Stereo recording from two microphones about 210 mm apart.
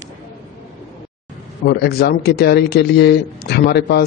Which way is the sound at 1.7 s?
50° left (ahead or behind).